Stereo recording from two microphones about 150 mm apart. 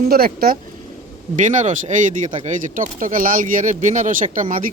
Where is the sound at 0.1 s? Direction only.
80° right.